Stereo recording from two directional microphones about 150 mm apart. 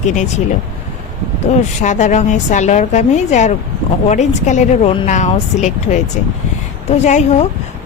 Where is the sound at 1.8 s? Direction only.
55° left (ahead or behind).